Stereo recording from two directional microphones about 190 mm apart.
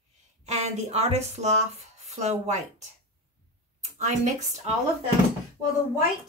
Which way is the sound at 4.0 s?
40° right (ahead or behind).